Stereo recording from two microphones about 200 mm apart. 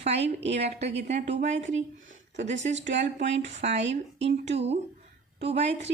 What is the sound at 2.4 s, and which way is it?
Speech, 35° right (ahead or behind).